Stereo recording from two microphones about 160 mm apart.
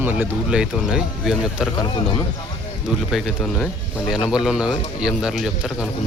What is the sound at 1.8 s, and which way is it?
Speech, 30° left (ahead or behind).